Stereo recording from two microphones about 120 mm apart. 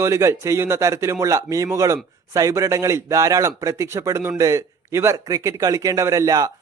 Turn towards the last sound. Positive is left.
turn(degrees=-30)  # may be behind; listen again after turning